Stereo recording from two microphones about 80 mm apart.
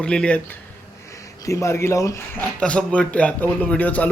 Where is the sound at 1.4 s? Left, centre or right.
Left.